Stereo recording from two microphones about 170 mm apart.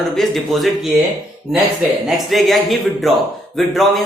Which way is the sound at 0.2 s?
Centre (ahead or behind).